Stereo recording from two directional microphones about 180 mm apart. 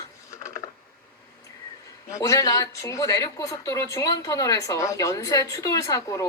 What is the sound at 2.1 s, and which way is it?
A woman's voice, 20° left (ahead or behind).